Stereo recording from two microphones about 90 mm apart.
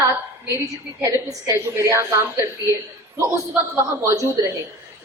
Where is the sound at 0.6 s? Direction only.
40° right (ahead or behind).